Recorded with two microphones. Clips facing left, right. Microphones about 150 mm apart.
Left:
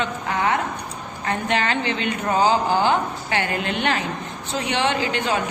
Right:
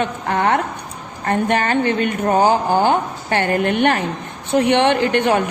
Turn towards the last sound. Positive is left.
turn(degrees=-55)  # may be behind; listen again after turning